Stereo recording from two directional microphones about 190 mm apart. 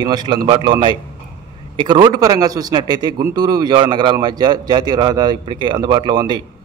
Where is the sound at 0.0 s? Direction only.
20° right (ahead or behind).